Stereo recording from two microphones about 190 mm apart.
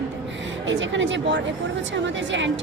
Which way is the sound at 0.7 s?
80° right.